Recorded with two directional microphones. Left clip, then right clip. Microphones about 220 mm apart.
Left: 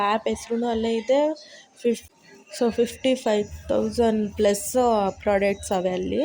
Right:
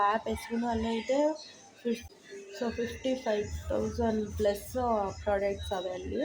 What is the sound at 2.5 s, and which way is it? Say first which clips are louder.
Speech: left 12 dB; 30° left (ahead or behind).